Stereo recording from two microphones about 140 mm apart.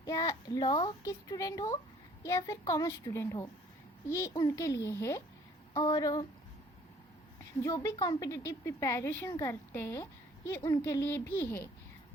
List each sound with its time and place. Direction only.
0.0 s a woman's voice: 25° left (ahead or behind)
7.6 s a woman's voice: 25° left (ahead or behind)